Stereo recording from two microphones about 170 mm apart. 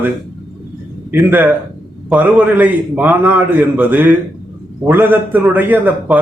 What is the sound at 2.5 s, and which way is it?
A man's voice, 10° right (ahead or behind).